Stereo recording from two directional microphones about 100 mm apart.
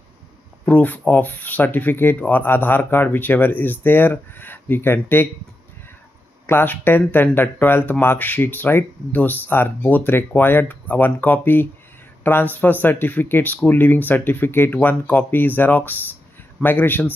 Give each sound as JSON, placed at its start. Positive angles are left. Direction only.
{"t": 0.7, "sound": "speech", "side_deg": 15}
{"t": 6.4, "sound": "speech", "side_deg": 20}